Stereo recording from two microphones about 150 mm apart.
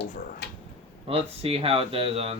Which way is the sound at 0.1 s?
55° left (ahead or behind).